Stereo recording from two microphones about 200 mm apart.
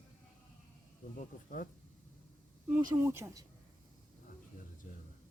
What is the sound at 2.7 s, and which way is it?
Speech, 10° right (ahead or behind).